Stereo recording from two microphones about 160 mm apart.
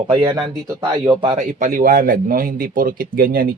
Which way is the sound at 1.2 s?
35° right (ahead or behind).